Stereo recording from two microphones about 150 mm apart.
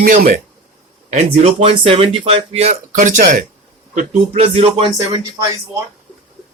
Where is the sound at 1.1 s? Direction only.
45° right (ahead or behind).